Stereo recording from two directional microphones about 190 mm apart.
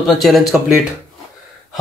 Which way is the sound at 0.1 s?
Centre (ahead or behind).